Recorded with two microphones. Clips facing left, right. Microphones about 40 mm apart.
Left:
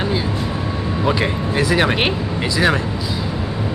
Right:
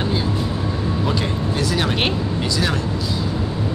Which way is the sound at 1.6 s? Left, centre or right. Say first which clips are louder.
Left 6 dB; left.